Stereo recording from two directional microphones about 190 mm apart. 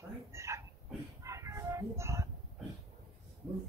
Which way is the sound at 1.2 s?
15° right (ahead or behind).